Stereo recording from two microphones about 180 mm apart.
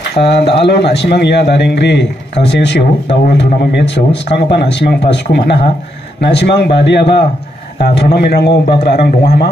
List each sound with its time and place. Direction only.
0.2 s a man's voice: 70° left (ahead or behind)